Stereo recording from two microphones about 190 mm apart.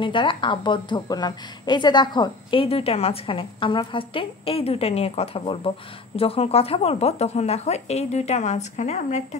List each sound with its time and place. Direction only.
0.0 s a woman's voice: 25° left (ahead or behind)